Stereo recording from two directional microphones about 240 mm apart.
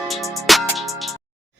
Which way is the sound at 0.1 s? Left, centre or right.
Centre.